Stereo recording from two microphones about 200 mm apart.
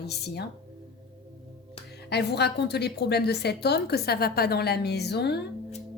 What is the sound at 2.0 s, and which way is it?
A woman's voice, 55° left (ahead or behind).